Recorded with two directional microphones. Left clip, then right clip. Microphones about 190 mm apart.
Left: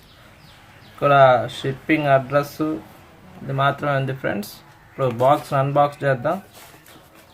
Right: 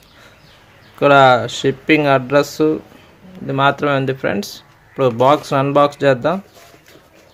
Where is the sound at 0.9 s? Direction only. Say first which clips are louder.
Right 4 dB; 50° right (ahead or behind).